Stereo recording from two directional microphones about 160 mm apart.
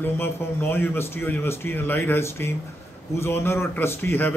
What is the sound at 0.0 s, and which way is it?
Speech, 15° left (ahead or behind).